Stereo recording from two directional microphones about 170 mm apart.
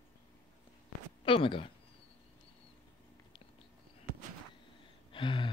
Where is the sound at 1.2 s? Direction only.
30° left (ahead or behind).